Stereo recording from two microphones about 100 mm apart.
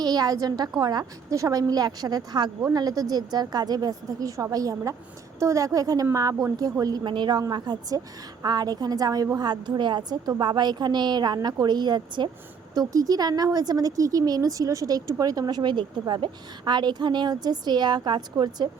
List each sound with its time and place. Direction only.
0.0 s speech: 40° right (ahead or behind)
7.0 s a woman's voice: 50° right (ahead or behind)